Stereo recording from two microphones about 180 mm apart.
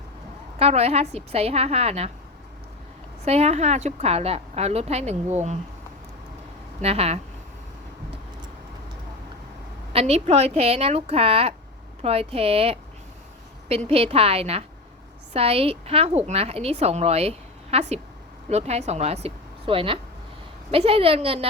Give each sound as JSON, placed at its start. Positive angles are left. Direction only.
{"t": 0.6, "sound": "a woman's voice", "side_deg": -35}
{"t": 3.2, "sound": "a woman's voice", "side_deg": -35}
{"t": 6.8, "sound": "a woman's voice", "side_deg": -35}
{"t": 9.9, "sound": "a woman's voice", "side_deg": -35}